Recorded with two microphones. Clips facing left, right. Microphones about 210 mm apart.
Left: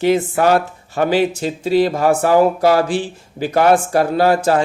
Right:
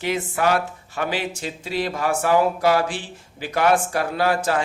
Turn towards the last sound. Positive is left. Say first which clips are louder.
# left 7 dB
turn(degrees=35)  # may be behind; listen again after turning